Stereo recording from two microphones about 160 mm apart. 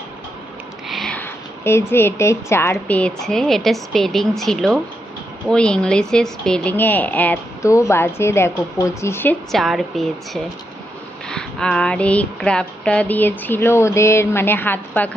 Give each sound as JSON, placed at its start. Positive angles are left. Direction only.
{"t": 0.9, "sound": "a sound", "side_deg": 0}
{"t": 1.9, "sound": "a woman's voice", "side_deg": 15}
{"t": 9.5, "sound": "a woman's voice", "side_deg": 0}